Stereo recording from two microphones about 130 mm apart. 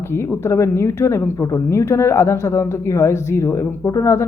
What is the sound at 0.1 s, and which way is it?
A woman's voice, 20° left (ahead or behind).